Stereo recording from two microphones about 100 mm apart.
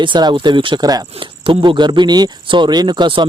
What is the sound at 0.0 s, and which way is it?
Speech, 50° right (ahead or behind).